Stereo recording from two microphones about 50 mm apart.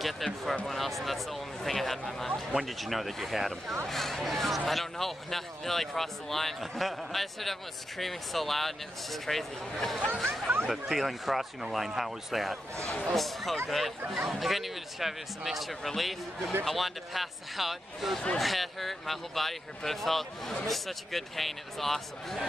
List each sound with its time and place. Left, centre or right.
0.0 s speech: centre
12.7 s a man's voice: left
13.1 s speech: centre